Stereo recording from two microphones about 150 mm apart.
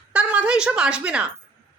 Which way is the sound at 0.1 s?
10° right (ahead or behind).